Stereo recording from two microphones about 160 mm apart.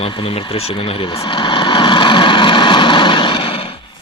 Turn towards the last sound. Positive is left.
turn(degrees=30)  # may be behind; listen again after turning